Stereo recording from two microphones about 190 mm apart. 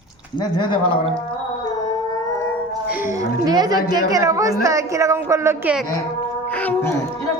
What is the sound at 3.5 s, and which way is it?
A woman's voice, 20° right (ahead or behind).